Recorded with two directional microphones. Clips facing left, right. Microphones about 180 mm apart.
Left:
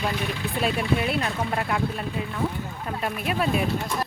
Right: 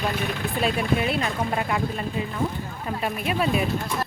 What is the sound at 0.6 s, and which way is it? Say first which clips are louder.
Speech: right 1 dB; centre (ahead or behind).